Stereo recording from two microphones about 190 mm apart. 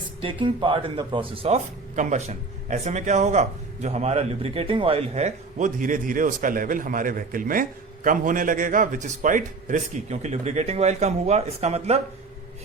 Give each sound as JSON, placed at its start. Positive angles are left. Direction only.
{"t": 0.2, "sound": "speech", "side_deg": -25}